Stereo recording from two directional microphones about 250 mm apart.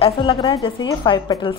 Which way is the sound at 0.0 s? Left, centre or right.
Left.